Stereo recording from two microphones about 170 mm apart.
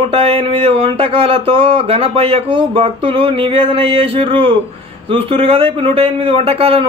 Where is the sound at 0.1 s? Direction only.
35° right (ahead or behind).